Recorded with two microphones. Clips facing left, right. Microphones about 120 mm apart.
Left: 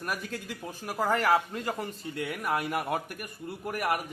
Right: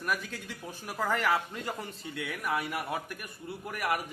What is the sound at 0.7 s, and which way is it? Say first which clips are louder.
A man's voice: left 3 dB; 35° left (ahead or behind).